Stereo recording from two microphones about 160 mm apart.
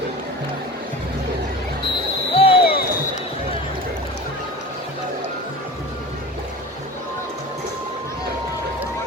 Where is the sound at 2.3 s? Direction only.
35° left (ahead or behind).